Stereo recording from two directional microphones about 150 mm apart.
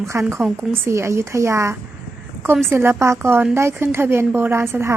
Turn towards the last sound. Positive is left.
turn(degrees=-15)  # may be behind; listen again after turning